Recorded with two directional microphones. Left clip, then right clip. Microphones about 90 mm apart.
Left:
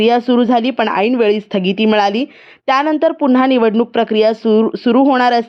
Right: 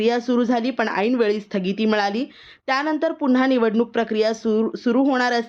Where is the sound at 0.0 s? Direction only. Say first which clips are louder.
Left 8 dB; 45° left (ahead or behind).